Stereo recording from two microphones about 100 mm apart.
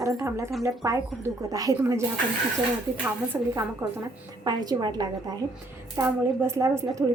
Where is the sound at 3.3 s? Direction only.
30° right (ahead or behind).